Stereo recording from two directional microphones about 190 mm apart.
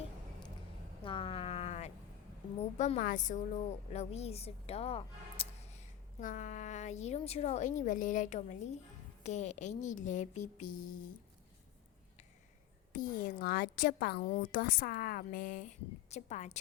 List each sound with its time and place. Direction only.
1.0 s a sound: 30° left (ahead or behind)
2.6 s a woman's voice: 35° left (ahead or behind)
12.9 s a woman's voice: 45° left (ahead or behind)